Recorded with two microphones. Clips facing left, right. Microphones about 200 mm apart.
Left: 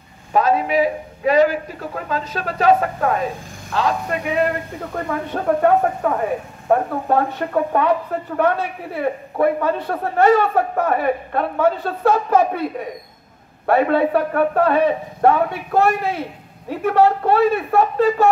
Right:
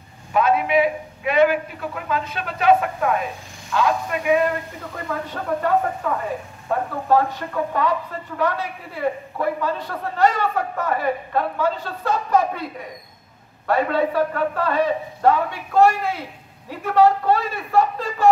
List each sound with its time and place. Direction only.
0.3 s a man's voice: 35° left (ahead or behind)
4.9 s speech: 50° left (ahead or behind)
13.7 s speech: 60° left (ahead or behind)